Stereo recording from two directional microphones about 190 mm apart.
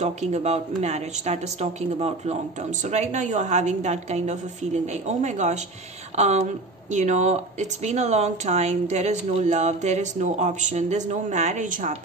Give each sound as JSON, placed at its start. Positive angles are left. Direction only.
{"t": 0.0, "sound": "speech", "side_deg": -35}